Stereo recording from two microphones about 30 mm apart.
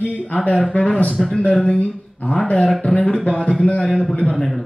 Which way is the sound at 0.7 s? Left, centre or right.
Left.